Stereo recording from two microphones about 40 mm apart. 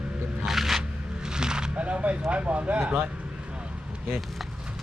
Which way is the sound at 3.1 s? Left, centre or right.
Right.